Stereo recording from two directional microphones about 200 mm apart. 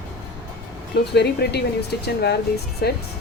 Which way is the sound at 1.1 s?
55° left (ahead or behind).